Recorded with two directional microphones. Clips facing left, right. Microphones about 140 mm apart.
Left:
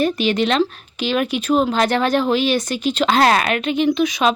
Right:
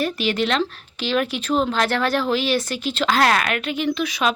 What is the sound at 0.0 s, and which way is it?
Speech, 20° left (ahead or behind).